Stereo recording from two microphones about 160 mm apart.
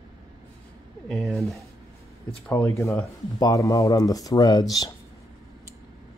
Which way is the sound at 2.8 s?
15° left (ahead or behind).